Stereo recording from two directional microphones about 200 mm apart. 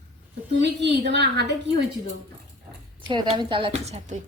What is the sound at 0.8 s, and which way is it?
Speech, 60° right (ahead or behind).